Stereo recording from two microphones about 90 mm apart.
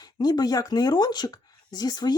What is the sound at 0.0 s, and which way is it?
Speech, 50° left (ahead or behind).